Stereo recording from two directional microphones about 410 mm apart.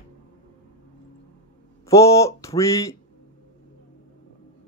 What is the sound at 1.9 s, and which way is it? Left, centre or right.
Speech, centre.